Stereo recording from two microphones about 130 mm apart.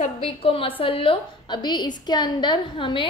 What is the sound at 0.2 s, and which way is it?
A woman's voice, 45° left (ahead or behind).